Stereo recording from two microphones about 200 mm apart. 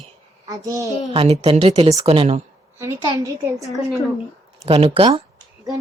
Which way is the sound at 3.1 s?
15° right (ahead or behind).